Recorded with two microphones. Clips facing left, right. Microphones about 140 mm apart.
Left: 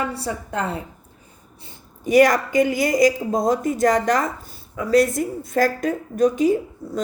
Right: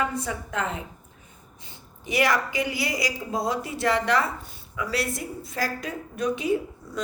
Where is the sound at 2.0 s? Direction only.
45° left (ahead or behind).